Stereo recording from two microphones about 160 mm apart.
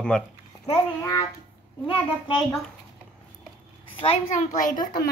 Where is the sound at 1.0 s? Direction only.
20° left (ahead or behind).